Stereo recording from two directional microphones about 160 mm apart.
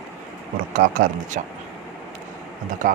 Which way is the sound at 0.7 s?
55° right (ahead or behind).